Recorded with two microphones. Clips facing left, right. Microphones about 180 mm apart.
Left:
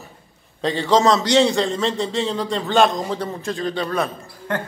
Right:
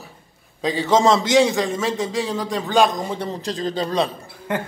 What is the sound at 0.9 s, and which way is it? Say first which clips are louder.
Speech: even; 20° right (ahead or behind).